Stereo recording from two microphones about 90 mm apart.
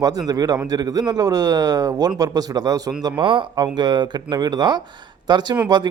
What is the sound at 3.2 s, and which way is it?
Speech, 70° right (ahead or behind).